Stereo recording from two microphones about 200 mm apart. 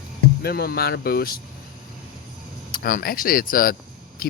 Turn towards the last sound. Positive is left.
turn(degrees=45)  # may be behind; listen again after turning